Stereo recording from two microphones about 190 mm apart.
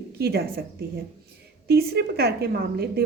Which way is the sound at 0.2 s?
55° right (ahead or behind).